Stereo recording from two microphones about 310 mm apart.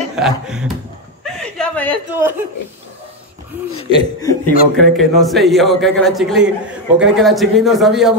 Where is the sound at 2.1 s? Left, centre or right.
Centre.